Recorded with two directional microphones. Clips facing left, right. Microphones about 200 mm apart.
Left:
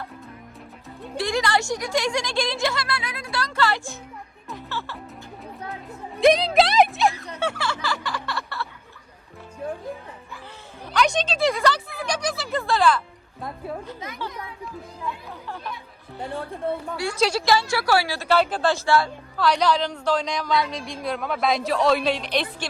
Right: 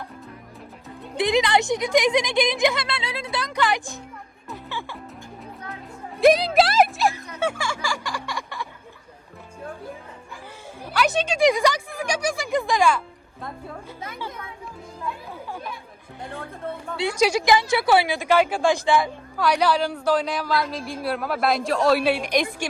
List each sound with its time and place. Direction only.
1.1 s speech: 20° right (ahead or behind)
4.4 s music: 10° right (ahead or behind)
6.1 s speech: centre (ahead or behind)
7.3 s a sound: 10° right (ahead or behind)
10.8 s a sound: 5° right (ahead or behind)
15.3 s speech: 10° right (ahead or behind)
17.2 s speech: 10° right (ahead or behind)